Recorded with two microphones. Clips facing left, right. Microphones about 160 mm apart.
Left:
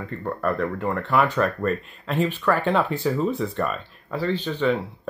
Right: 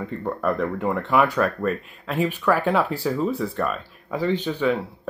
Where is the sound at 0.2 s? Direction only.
10° right (ahead or behind).